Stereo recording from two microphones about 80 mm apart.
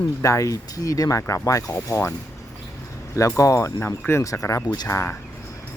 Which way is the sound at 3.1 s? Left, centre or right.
Left.